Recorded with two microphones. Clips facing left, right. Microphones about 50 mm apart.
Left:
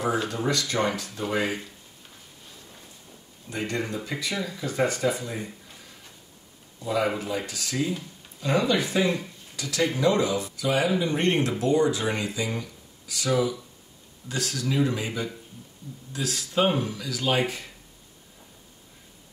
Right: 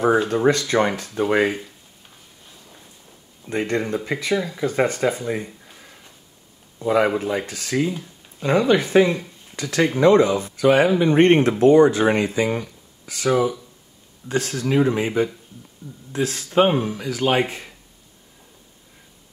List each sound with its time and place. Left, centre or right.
0.3 s speech: right
3.4 s speech: right
6.8 s speech: right